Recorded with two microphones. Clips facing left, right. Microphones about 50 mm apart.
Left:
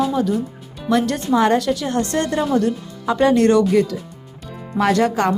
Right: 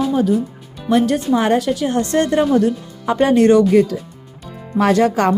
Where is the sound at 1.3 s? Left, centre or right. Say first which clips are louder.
Left 2 dB; right.